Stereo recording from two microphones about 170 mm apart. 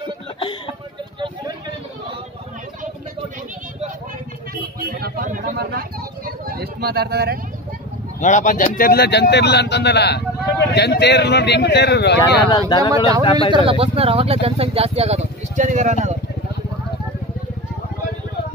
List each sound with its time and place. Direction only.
0.4 s chuckle: 30° left (ahead or behind)
4.7 s a sound: 65° right (ahead or behind)
5.6 s vehicle: 65° right (ahead or behind)
8.2 s a man's voice: 50° left (ahead or behind); by 12.4 s 75° left (ahead or behind)
12.4 s speech: 25° left (ahead or behind)
13.5 s speech: 35° right (ahead or behind)